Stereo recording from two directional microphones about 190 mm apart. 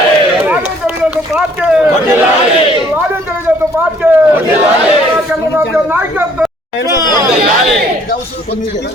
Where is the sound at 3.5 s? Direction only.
10° right (ahead or behind).